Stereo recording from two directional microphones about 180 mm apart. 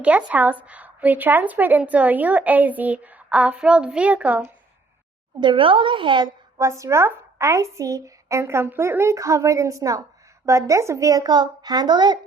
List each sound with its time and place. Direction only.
0.0 s a woman's voice: 5° right (ahead or behind)
5.4 s a woman's voice: 25° right (ahead or behind)